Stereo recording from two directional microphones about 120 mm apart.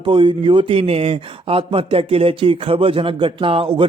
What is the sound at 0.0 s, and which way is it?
Speech, 45° right (ahead or behind).